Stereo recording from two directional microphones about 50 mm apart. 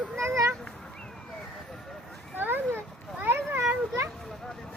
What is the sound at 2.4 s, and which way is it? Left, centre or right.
Children playing, right.